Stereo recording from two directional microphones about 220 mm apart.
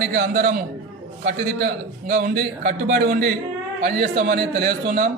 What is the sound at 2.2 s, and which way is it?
A man's voice, 45° right (ahead or behind).